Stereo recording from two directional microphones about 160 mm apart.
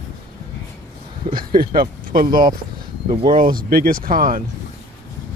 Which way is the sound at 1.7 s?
65° right (ahead or behind).